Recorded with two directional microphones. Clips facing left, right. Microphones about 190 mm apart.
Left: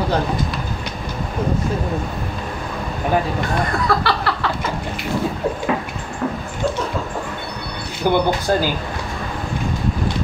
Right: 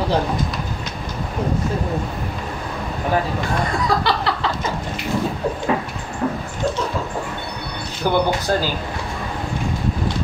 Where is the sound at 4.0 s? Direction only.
20° right (ahead or behind).